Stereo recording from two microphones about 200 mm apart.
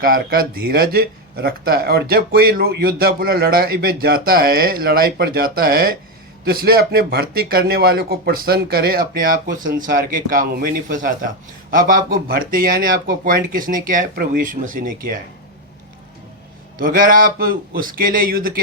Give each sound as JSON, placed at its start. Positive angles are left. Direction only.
{"t": 0.0, "sound": "speech", "side_deg": -45}
{"t": 16.7, "sound": "speech", "side_deg": -45}